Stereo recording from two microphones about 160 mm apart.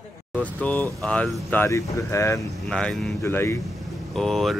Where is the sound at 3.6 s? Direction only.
Centre (ahead or behind).